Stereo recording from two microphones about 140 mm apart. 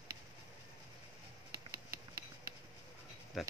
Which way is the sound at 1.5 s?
25° right (ahead or behind).